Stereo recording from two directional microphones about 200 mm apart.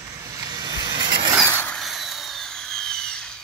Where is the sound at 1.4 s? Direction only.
10° left (ahead or behind).